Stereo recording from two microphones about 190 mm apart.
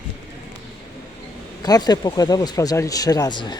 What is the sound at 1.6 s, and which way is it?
Speech, 20° left (ahead or behind).